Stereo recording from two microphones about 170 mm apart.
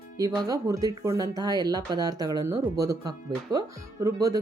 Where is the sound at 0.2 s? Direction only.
20° right (ahead or behind).